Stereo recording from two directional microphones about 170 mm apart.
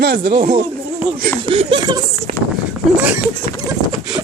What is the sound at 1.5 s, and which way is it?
Speech, 30° right (ahead or behind).